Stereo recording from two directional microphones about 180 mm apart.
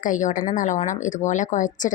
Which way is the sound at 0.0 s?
45° left (ahead or behind).